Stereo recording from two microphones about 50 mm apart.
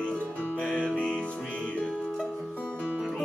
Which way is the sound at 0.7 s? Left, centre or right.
Centre.